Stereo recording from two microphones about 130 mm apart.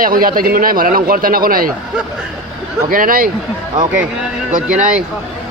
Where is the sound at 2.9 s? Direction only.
90° right.